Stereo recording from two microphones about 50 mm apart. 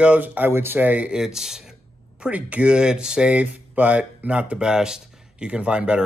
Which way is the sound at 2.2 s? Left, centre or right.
Right.